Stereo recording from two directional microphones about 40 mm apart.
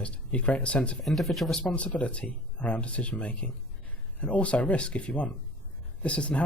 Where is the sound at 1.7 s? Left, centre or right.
Left.